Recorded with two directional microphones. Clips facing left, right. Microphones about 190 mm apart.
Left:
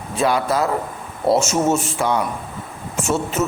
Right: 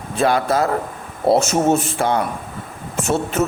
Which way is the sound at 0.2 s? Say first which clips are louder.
Right 2 dB; 50° right (ahead or behind).